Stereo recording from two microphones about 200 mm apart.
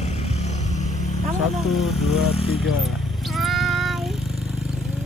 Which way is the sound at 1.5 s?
Centre (ahead or behind).